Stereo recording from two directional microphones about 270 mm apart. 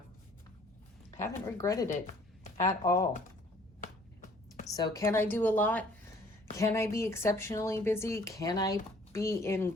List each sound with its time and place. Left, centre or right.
1.1 s speech: centre
3.8 s a sound: left
4.7 s speech: centre